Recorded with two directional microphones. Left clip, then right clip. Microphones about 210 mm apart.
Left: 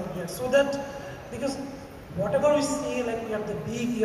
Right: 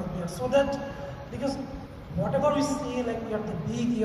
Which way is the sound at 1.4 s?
40° right (ahead or behind).